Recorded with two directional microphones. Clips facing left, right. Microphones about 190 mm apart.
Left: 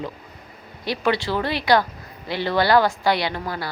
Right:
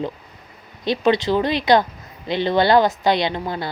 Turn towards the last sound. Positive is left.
turn(degrees=-20)  # may be behind; listen again after turning